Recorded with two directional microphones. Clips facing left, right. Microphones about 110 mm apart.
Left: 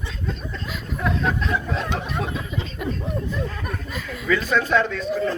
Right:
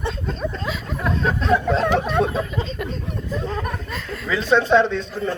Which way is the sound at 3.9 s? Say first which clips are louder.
Left 4 dB; 5° left (ahead or behind).